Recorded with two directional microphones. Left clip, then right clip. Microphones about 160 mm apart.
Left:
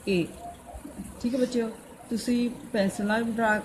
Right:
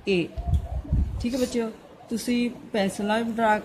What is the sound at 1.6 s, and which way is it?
A woman's voice, 20° right (ahead or behind).